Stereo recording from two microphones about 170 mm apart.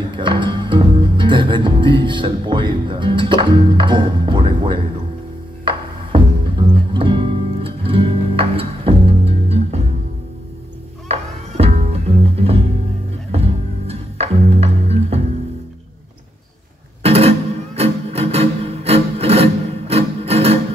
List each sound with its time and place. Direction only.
0.1 s music: 30° right (ahead or behind)
11.1 s music: 35° right (ahead or behind)
17.0 s music: 35° right (ahead or behind)